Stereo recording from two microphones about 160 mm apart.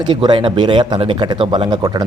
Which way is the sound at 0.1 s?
30° right (ahead or behind).